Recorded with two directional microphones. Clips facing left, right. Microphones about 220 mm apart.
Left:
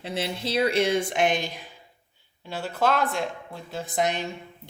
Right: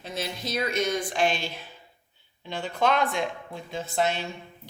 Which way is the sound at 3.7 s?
15° left (ahead or behind).